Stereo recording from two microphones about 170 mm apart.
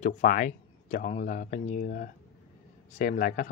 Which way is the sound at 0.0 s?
50° left (ahead or behind).